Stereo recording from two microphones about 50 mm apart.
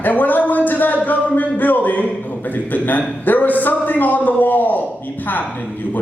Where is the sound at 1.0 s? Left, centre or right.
Left.